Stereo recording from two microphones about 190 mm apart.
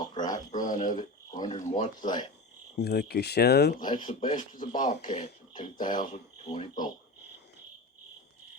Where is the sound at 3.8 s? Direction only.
25° left (ahead or behind).